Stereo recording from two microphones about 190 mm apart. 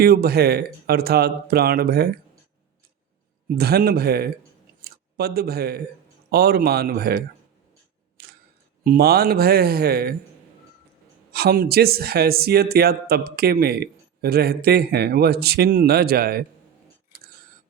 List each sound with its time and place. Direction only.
0.0 s speech: 55° right (ahead or behind)
3.5 s speech: 55° right (ahead or behind)
8.2 s camera: 55° right (ahead or behind)
8.8 s speech: 55° right (ahead or behind)
11.3 s speech: 55° right (ahead or behind)